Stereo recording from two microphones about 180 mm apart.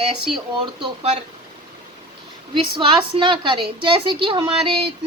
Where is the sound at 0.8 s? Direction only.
35° right (ahead or behind).